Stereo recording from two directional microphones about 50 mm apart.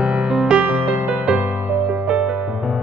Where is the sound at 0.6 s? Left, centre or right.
Right.